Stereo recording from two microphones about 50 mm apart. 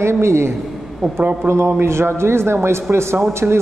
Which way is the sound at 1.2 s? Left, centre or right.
Right.